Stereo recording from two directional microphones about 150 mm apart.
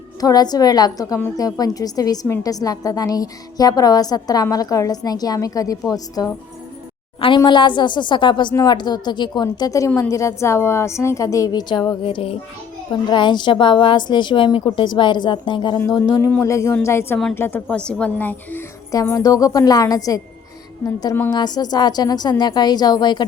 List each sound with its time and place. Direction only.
0.2 s a woman's voice: 25° left (ahead or behind)
19.0 s speech: 20° left (ahead or behind)